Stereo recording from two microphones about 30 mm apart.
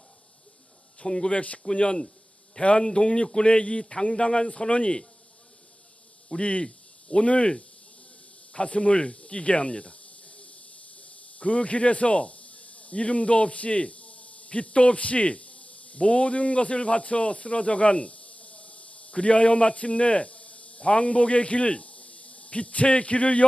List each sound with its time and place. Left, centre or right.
1.0 s a man's voice: left
1.3 s speech: left
3.8 s a man's voice: left
6.4 s speech: left